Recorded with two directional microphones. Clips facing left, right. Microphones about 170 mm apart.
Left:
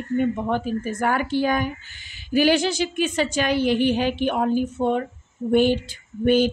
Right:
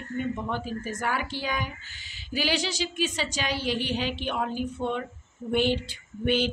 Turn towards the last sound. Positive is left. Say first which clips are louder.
# left 7 dB
turn(degrees=45)  # may be behind; listen again after turning